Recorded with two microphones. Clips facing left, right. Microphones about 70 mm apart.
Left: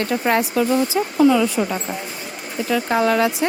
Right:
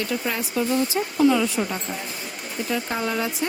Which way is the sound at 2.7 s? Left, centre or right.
Left.